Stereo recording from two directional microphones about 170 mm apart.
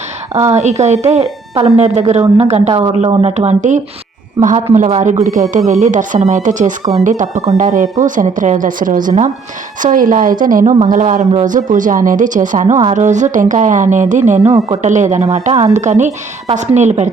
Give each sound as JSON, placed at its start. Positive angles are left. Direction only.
{"t": 0.5, "sound": "a man's voice", "side_deg": -40}